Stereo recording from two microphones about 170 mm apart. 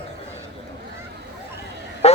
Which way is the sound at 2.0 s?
40° left (ahead or behind).